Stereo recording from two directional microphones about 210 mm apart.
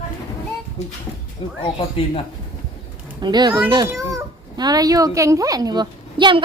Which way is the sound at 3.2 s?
20° right (ahead or behind).